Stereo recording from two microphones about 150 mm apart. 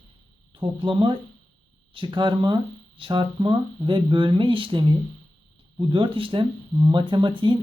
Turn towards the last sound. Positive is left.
turn(degrees=-30)  # may be behind; listen again after turning